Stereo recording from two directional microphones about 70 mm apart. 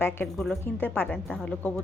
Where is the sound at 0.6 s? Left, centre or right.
Left.